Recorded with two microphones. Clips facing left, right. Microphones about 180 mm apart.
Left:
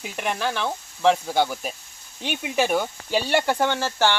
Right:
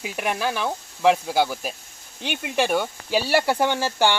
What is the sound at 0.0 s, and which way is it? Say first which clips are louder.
Speech: right 1 dB; 5° right (ahead or behind).